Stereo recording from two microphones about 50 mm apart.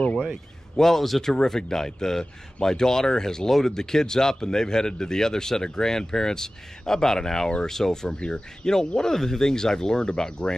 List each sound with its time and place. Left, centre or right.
0.3 s a man's voice: centre